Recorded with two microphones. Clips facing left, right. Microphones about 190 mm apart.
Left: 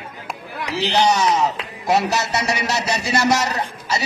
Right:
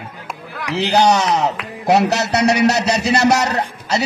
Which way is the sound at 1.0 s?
65° right (ahead or behind).